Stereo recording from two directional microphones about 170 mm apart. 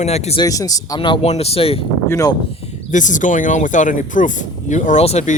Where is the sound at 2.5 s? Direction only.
40° left (ahead or behind).